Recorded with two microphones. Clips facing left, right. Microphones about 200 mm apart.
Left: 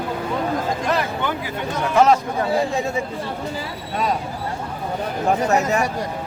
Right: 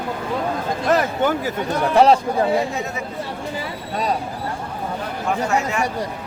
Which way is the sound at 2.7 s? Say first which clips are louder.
Left 4 dB; 30° left (ahead or behind).